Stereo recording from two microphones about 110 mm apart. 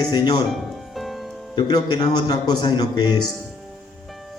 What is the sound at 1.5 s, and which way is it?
Speech, 40° left (ahead or behind).